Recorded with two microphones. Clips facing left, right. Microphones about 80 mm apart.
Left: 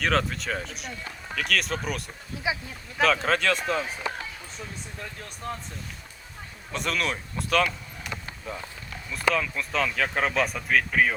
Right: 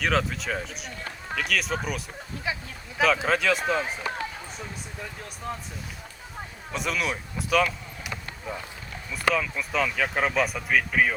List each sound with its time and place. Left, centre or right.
0.0 s speech: centre
2.5 s speech: centre
3.0 s speech: centre
5.0 s speech: centre
6.7 s speech: centre